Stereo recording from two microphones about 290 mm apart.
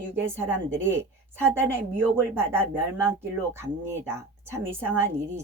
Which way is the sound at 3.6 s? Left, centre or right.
Centre.